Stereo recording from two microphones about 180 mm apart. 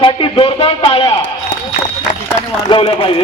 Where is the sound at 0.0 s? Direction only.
30° left (ahead or behind).